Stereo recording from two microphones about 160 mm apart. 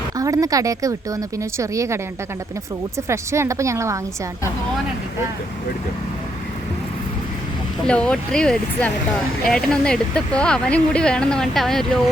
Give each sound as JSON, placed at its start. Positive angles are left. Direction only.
{"t": 0.2, "sound": "speech", "side_deg": -20}
{"t": 3.1, "sound": "a woman's voice", "side_deg": -15}
{"t": 7.9, "sound": "speech", "side_deg": 5}